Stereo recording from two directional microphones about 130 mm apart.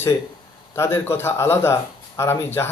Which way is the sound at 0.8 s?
20° left (ahead or behind).